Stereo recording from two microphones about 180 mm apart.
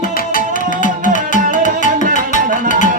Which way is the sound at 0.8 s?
45° left (ahead or behind).